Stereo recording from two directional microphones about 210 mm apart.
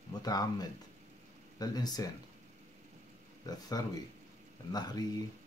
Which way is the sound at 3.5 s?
20° left (ahead or behind).